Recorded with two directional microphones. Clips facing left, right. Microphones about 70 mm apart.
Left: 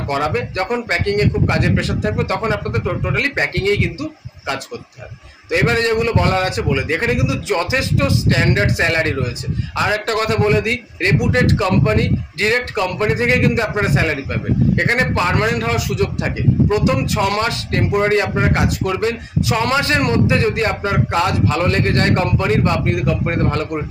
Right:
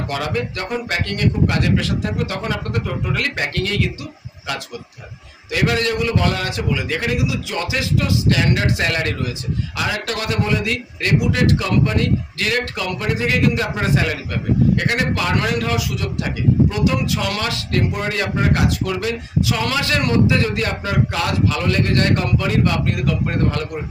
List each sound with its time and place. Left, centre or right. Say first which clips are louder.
0.1 s speech: left 6 dB; left
5.5 s speech: left 3 dB; left